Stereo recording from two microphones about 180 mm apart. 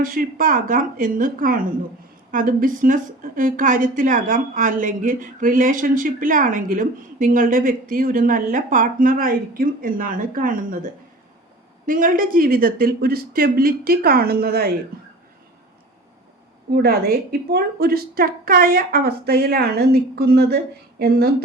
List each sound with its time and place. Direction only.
0.0 s a woman's voice: 50° right (ahead or behind)
11.9 s a woman's voice: 50° right (ahead or behind)
16.7 s a woman's voice: 60° right (ahead or behind)